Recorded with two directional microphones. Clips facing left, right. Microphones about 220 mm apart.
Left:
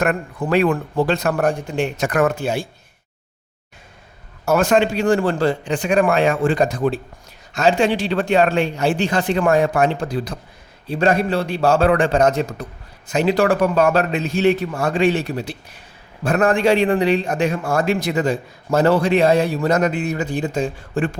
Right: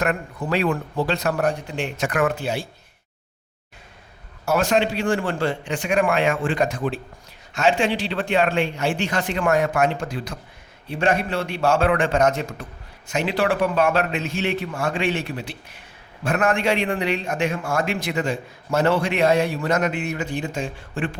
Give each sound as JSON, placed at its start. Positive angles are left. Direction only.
{"t": 0.0, "sound": "speech", "side_deg": 50}
{"t": 4.4, "sound": "a man's voice", "side_deg": 50}